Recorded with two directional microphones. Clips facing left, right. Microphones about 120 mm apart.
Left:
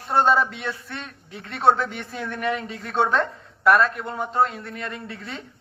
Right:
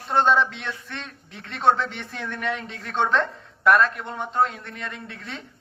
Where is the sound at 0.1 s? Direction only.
5° left (ahead or behind).